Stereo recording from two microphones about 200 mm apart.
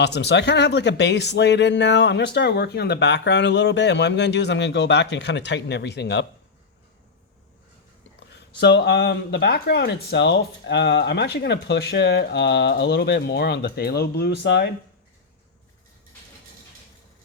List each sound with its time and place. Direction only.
0.0 s speech: 60° left (ahead or behind)
8.3 s speech: 60° left (ahead or behind)